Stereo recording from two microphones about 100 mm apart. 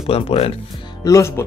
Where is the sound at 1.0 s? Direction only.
30° left (ahead or behind).